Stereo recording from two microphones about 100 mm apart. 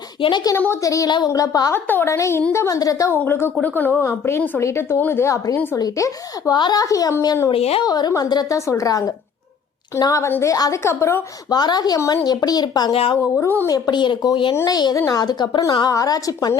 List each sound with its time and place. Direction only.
0.2 s speech: 55° left (ahead or behind)
0.5 s a woman's voice: 25° left (ahead or behind)
0.8 s a woman's voice: 35° left (ahead or behind)
1.7 s a woman's voice: 20° left (ahead or behind)
3.1 s a woman's voice: 20° left (ahead or behind); by 7.3 s 40° left (ahead or behind)
7.5 s a woman's voice: 80° left
7.9 s a woman's voice: 40° left (ahead or behind)
11.4 s a woman's voice: 45° left (ahead or behind)
12.9 s speech: 70° left (ahead or behind)
13.3 s a woman's voice: 25° left (ahead or behind)
13.7 s speech: 40° left (ahead or behind)
14.5 s a woman's voice: 35° left (ahead or behind)
14.9 s a woman's voice: 30° left (ahead or behind)
15.2 s a woman's voice: 45° left (ahead or behind)